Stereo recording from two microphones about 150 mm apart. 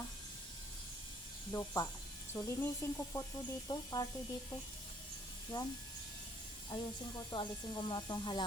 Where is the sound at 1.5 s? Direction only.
20° left (ahead or behind).